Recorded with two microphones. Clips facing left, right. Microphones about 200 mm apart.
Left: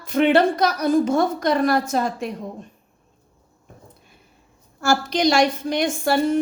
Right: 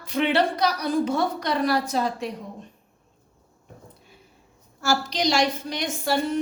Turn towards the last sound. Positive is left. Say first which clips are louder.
# left 5 dB
turn(degrees=50)  # may be behind; listen again after turning